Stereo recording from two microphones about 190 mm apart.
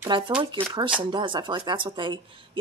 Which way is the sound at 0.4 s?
25° right (ahead or behind).